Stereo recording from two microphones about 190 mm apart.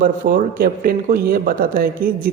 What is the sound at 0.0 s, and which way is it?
A woman's voice, 45° right (ahead or behind).